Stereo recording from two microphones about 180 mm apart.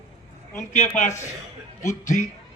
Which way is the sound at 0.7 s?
40° left (ahead or behind).